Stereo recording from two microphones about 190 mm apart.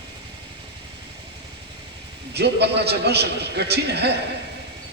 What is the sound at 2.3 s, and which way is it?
A man's voice, 60° right (ahead or behind).